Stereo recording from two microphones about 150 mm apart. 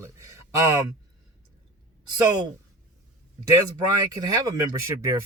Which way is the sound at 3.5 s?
25° right (ahead or behind).